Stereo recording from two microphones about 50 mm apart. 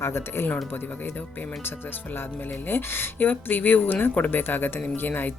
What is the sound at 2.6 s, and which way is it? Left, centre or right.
Speech, left.